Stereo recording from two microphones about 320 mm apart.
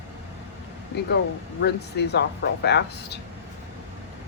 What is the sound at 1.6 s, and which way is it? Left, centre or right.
Speech, left.